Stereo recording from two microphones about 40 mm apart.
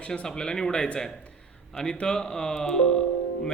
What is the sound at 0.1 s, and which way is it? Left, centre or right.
A man's voice, centre.